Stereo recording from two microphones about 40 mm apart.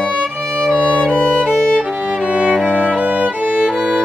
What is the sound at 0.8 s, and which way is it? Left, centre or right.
Violin, left.